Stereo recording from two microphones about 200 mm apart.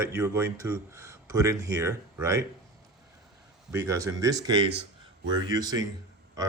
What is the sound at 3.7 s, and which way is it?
Speech, 15° right (ahead or behind).